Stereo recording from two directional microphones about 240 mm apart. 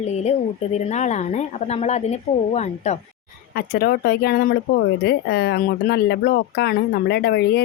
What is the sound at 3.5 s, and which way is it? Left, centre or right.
Speech, left.